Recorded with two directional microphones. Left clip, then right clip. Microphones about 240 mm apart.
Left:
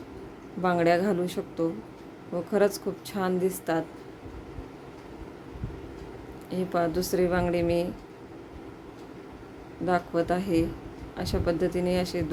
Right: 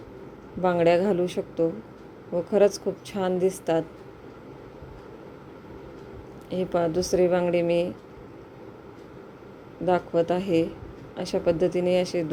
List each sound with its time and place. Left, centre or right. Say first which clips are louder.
0.6 s a woman's voice: right 3 dB; centre
6.5 s a woman's voice: right 2 dB; centre
9.8 s a woman's voice: right 3 dB; centre